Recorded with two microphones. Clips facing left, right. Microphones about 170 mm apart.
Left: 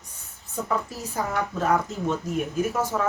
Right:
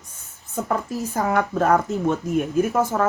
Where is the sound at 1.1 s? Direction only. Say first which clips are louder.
Right 6 dB; 55° right (ahead or behind).